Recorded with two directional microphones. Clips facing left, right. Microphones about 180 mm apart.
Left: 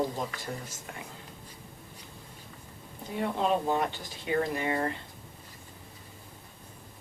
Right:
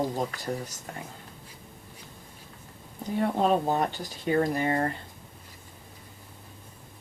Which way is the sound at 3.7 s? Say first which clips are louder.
Right 2 dB; 40° right (ahead or behind).